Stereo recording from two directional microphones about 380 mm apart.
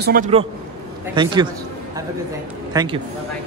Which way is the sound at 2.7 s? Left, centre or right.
Centre.